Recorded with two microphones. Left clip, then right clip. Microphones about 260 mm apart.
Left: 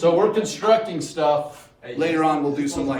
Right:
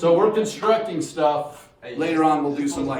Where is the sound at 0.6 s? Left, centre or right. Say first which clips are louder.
Left 4 dB; centre.